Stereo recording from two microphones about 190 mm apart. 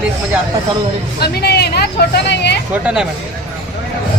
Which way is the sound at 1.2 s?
55° left (ahead or behind).